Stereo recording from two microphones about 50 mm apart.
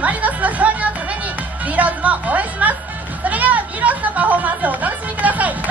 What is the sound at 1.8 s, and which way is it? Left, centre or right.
Speech, right.